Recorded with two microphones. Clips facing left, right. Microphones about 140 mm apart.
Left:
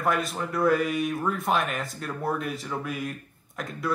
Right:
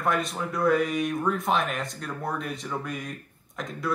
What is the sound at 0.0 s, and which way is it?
Speech, centre (ahead or behind).